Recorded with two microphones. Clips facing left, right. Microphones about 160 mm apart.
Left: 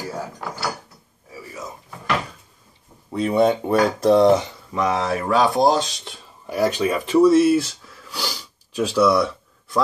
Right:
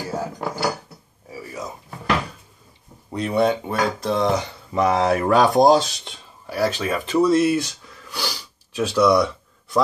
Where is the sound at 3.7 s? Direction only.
40° left (ahead or behind).